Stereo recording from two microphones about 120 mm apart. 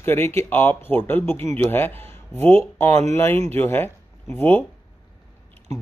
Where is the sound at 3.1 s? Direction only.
20° left (ahead or behind).